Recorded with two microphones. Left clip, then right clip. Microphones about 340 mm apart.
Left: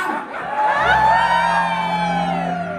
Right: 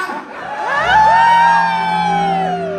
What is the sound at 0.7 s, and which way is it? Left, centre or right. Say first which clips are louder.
Music: right 6 dB; right.